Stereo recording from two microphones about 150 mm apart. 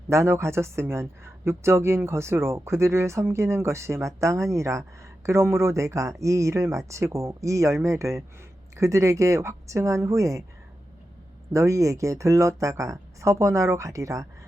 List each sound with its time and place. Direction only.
0.1 s speech: 20° right (ahead or behind)
11.5 s speech: 20° right (ahead or behind)